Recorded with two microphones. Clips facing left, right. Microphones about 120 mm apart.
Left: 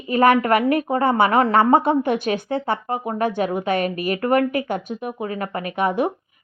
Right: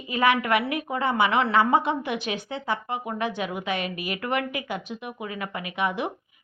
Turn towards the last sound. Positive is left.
turn(degrees=50)  # may be behind; listen again after turning